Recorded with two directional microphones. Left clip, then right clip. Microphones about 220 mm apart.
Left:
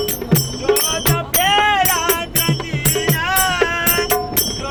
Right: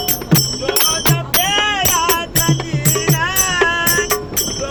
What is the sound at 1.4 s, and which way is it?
Music, 15° left (ahead or behind).